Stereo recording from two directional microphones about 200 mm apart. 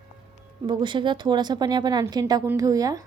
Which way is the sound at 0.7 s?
25° right (ahead or behind).